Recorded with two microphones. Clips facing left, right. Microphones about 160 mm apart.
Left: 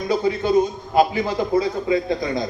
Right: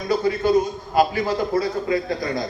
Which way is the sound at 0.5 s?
20° left (ahead or behind).